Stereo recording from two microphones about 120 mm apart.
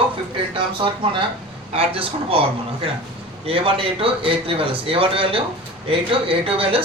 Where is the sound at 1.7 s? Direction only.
50° right (ahead or behind).